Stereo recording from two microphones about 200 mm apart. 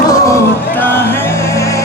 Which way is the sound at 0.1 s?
10° left (ahead or behind).